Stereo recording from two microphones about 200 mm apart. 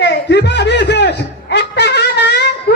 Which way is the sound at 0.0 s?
60° left (ahead or behind).